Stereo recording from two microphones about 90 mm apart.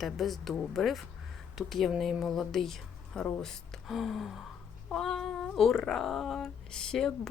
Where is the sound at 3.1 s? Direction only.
15° left (ahead or behind).